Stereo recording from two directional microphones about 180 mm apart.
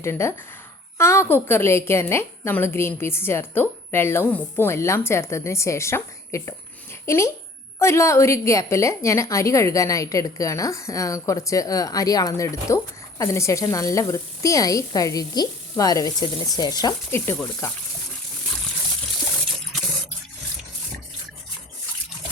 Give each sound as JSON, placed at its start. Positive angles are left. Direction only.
{"t": 0.0, "sound": "a woman's voice", "side_deg": 15}